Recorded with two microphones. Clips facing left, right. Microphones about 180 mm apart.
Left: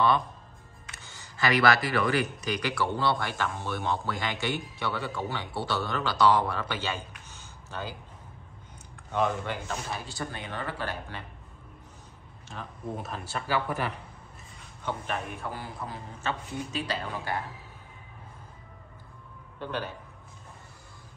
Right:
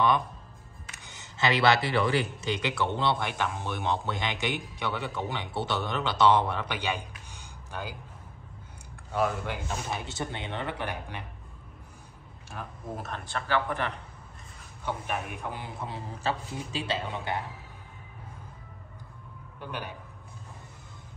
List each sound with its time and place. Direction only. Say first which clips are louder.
0.9 s a man's voice: even; 20° right (ahead or behind)
9.1 s a man's voice: left 1 dB; 10° right (ahead or behind)
12.4 s speech: left 1 dB; 5° right (ahead or behind)
14.9 s speech: even; 10° right (ahead or behind)
15.9 s a man's voice: right 3 dB; 30° right (ahead or behind)
19.6 s speech: left 4 dB; 10° right (ahead or behind)